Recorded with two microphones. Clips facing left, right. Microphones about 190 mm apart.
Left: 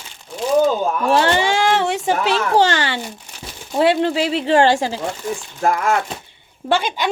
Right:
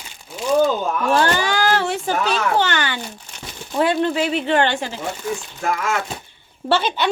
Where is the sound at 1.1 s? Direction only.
25° left (ahead or behind).